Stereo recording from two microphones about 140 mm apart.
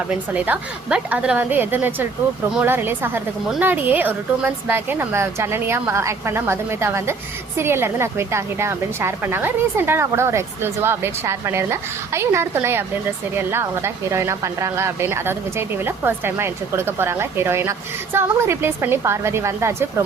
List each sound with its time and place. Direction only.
0.1 s a woman's voice: 10° right (ahead or behind)